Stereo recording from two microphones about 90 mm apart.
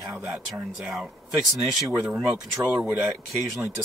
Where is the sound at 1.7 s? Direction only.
5° right (ahead or behind).